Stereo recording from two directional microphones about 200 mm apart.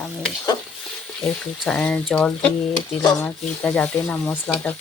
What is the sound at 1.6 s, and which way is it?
Speech, 5° left (ahead or behind).